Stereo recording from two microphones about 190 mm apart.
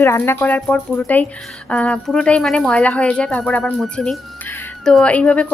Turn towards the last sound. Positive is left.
turn(degrees=5)  # may be behind; listen again after turning